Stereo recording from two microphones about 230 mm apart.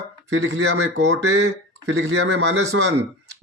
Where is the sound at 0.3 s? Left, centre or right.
Right.